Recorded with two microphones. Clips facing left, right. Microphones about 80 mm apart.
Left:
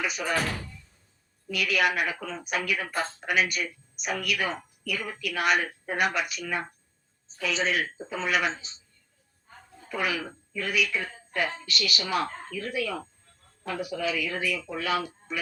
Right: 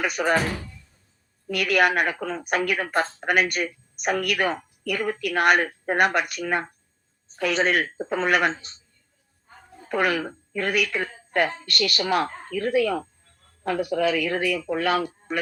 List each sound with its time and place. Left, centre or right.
0.0 s speech: right
1.5 s speech: right
9.9 s speech: right